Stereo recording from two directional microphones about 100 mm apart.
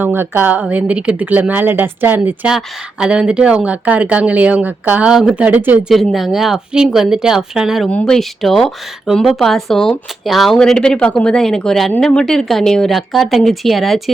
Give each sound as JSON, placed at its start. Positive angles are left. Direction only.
{"t": 0.0, "sound": "speech", "side_deg": -20}
{"t": 5.9, "sound": "speech", "side_deg": 0}
{"t": 7.9, "sound": "speech", "side_deg": 10}